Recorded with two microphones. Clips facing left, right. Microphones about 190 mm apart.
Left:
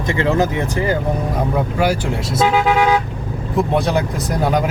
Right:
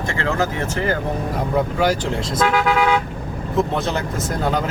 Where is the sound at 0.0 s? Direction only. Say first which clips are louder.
Left 5 dB; 20° left (ahead or behind).